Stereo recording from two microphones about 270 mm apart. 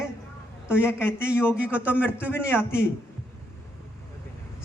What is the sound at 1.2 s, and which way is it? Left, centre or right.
Speech, centre.